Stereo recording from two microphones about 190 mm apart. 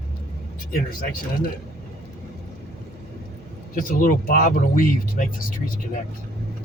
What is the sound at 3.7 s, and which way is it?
Speech, 45° left (ahead or behind).